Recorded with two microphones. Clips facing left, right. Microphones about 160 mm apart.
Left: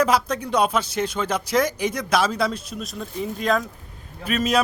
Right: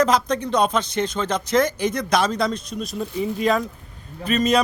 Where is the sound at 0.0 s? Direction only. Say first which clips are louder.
Right 1 dB; 10° left (ahead or behind).